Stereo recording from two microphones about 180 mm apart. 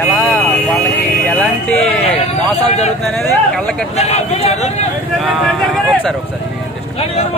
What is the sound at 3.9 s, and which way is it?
Speech, 35° left (ahead or behind).